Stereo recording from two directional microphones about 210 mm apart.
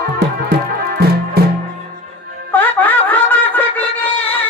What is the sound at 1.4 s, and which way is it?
Music, 50° right (ahead or behind).